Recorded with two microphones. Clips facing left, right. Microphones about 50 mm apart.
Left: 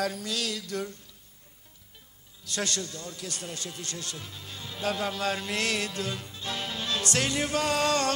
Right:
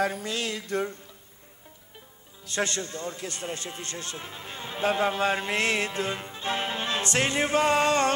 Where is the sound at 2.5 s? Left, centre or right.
Right.